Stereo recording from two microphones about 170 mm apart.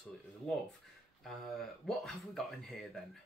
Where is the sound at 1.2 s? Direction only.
Centre (ahead or behind).